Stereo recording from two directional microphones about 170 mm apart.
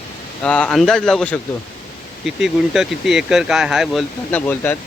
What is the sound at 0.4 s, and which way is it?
Speech, 5° left (ahead or behind).